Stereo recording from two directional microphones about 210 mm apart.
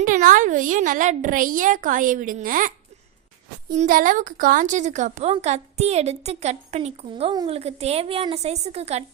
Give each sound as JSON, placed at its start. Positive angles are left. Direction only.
{"t": 0.0, "sound": "a woman's voice", "side_deg": -40}
{"t": 3.8, "sound": "a woman's voice", "side_deg": -40}